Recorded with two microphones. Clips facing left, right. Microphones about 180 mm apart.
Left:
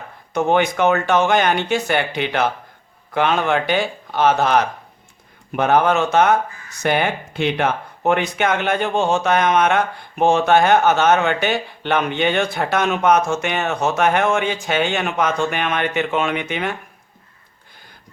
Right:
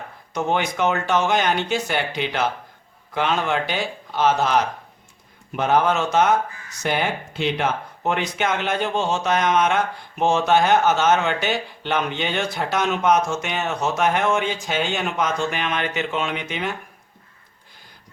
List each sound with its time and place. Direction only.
0.3 s speech: 55° left (ahead or behind)